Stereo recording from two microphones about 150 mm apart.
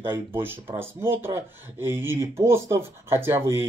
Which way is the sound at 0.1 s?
15° right (ahead or behind).